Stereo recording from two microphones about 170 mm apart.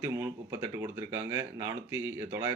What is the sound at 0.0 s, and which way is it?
Speech, 15° right (ahead or behind).